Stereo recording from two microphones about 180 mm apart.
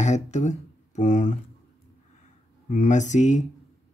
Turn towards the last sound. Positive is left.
turn(degrees=40)  # may be behind; listen again after turning